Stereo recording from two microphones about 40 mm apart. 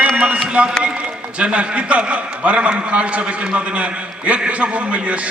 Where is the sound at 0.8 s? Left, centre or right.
Right.